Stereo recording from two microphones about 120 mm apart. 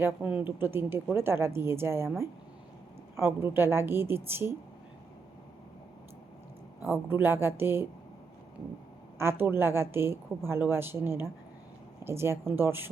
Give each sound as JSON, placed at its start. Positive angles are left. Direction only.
{"t": 0.0, "sound": "a woman's voice", "side_deg": -10}
{"t": 3.2, "sound": "a woman's voice", "side_deg": -20}
{"t": 6.8, "sound": "a woman's voice", "side_deg": -20}
{"t": 9.1, "sound": "a woman's voice", "side_deg": -20}